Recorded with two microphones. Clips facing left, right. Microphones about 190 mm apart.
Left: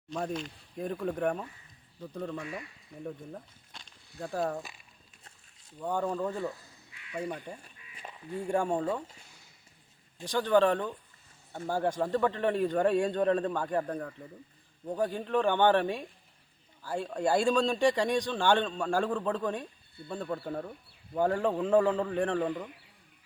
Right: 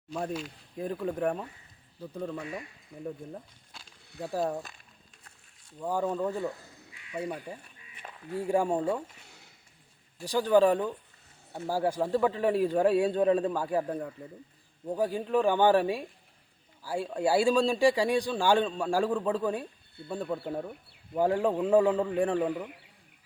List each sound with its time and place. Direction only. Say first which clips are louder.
0.1 s a man's voice: even; 5° right (ahead or behind)
2.4 s speech: right 2 dB; 25° right (ahead or behind)
3.0 s speech: right 2 dB; 5° right (ahead or behind)
5.8 s a man's voice: right 2 dB; 5° right (ahead or behind)
10.2 s a man's voice: right 2 dB; 10° right (ahead or behind)